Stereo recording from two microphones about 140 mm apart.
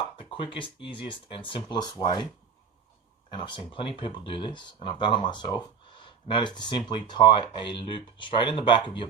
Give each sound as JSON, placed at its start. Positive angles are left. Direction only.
{"t": 0.2, "sound": "speech", "side_deg": 40}
{"t": 3.2, "sound": "speech", "side_deg": 35}